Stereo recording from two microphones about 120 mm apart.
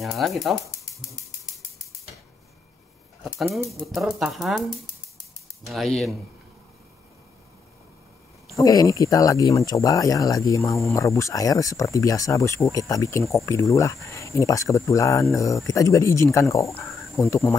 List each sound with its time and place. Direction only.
0.0 s speech: centre (ahead or behind)
3.8 s speech: centre (ahead or behind)
8.5 s speech: 30° left (ahead or behind)